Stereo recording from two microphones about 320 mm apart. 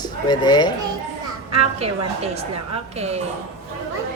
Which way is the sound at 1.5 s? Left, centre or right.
Centre.